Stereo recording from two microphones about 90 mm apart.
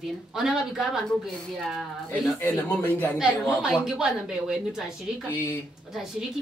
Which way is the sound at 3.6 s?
5° right (ahead or behind).